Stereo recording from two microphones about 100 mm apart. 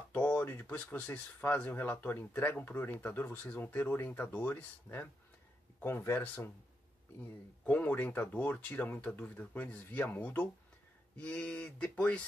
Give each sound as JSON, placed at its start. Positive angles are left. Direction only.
{"t": 0.1, "sound": "speech", "side_deg": 15}
{"t": 7.6, "sound": "speech", "side_deg": 15}